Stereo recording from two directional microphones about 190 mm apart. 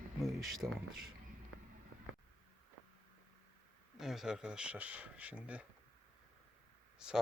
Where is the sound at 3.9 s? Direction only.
Centre (ahead or behind).